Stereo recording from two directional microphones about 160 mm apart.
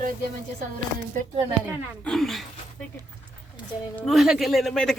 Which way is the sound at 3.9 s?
Centre (ahead or behind).